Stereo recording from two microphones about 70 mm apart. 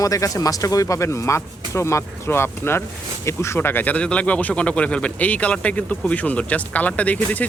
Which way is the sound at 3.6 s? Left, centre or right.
Left.